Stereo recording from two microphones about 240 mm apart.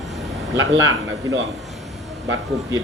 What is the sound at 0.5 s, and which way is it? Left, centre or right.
Speech, right.